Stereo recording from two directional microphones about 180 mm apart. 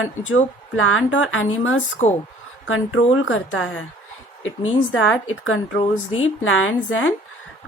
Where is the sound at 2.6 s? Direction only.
90° left.